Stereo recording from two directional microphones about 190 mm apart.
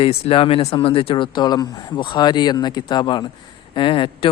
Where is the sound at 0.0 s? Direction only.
30° left (ahead or behind).